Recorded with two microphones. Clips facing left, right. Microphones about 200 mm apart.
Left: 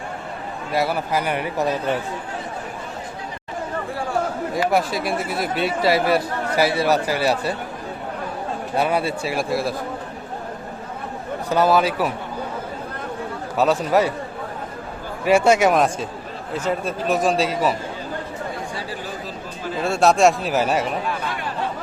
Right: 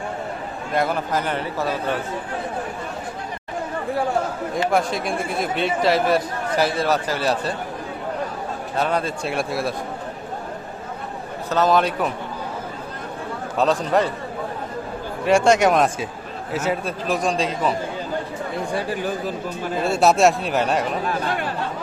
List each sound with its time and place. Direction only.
0.7 s speech: 5° left (ahead or behind)
4.7 s speech: 5° left (ahead or behind)
8.7 s a man's voice: 10° left (ahead or behind)
11.4 s speech: 10° left (ahead or behind)
13.6 s a man's voice: 5° left (ahead or behind)
15.2 s a man's voice: 5° left (ahead or behind)
18.7 s speech: 55° right (ahead or behind)
19.8 s a man's voice: centre (ahead or behind)